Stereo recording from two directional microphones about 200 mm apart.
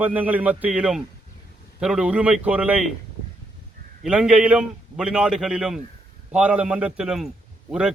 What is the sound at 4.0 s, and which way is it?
A man's voice, 5° right (ahead or behind).